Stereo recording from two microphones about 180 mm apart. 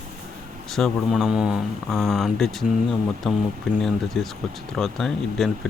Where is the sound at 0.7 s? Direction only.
Centre (ahead or behind).